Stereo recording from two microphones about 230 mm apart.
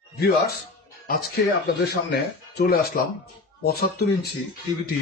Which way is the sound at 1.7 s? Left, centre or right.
Left.